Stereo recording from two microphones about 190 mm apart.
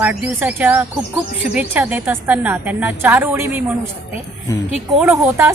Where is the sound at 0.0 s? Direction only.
10° right (ahead or behind).